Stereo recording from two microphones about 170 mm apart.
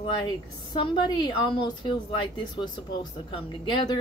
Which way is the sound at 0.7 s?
25° left (ahead or behind).